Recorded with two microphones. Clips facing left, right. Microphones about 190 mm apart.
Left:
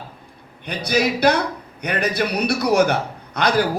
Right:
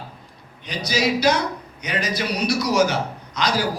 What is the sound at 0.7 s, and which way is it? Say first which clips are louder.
A man's voice: left 2 dB; 60° left (ahead or behind).